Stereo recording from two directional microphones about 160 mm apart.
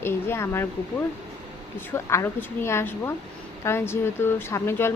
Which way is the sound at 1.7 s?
15° left (ahead or behind).